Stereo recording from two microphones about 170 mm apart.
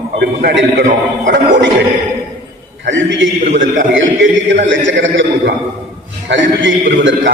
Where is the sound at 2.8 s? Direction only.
90° right.